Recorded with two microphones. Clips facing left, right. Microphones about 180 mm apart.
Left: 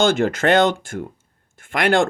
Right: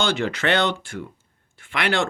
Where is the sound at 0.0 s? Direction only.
45° left (ahead or behind).